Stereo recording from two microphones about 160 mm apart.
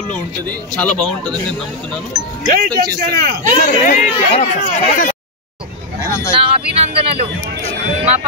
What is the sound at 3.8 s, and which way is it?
Speech, 50° left (ahead or behind).